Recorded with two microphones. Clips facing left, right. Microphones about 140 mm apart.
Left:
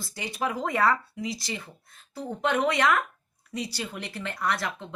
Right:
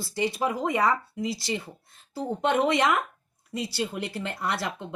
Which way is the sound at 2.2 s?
25° right (ahead or behind).